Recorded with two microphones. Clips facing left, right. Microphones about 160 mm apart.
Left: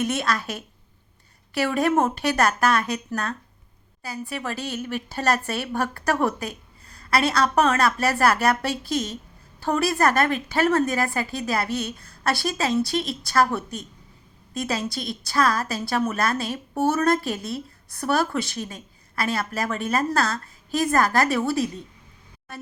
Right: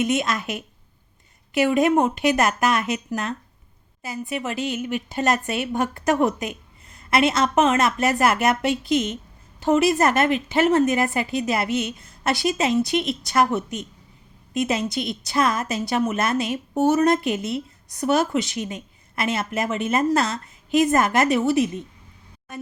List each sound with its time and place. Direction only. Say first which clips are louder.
0.0 s a woman's voice: right 2 dB; 20° right (ahead or behind)